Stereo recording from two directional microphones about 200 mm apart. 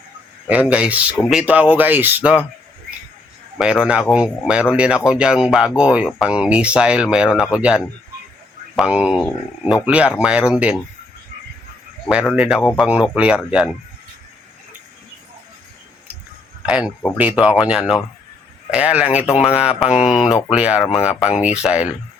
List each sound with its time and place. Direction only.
0.4 s speech: 5° right (ahead or behind)
3.6 s speech: 5° right (ahead or behind)
12.0 s speech: centre (ahead or behind)
16.6 s speech: 5° right (ahead or behind)
19.3 s speech: 30° left (ahead or behind)
19.9 s speech: 5° right (ahead or behind)